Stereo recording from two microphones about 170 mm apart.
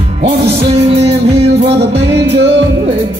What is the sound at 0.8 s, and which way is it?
Music, 35° right (ahead or behind).